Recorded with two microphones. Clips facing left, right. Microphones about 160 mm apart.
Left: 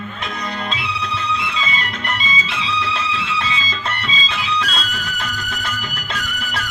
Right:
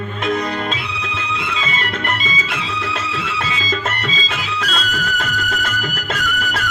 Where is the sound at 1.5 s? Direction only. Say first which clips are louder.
Right 2 dB; 50° right (ahead or behind).